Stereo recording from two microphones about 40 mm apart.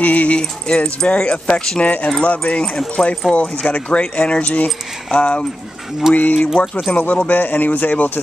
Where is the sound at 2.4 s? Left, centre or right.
Left.